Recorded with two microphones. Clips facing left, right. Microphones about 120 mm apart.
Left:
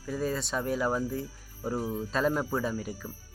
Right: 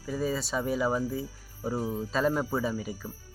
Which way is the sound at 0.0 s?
Centre (ahead or behind).